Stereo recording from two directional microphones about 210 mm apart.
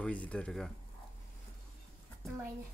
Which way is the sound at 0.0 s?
5° left (ahead or behind).